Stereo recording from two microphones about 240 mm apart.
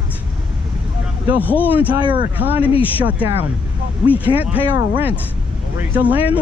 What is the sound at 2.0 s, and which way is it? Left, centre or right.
Speech, centre.